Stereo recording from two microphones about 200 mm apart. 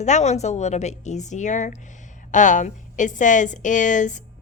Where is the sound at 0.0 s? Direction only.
35° left (ahead or behind).